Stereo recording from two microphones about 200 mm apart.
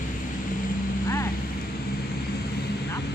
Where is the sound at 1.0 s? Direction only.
15° left (ahead or behind).